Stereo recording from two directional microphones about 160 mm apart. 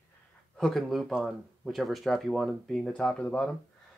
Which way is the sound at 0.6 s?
Centre (ahead or behind).